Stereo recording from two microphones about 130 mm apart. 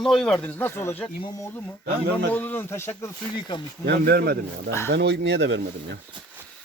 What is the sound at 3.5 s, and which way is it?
Speech, 35° left (ahead or behind).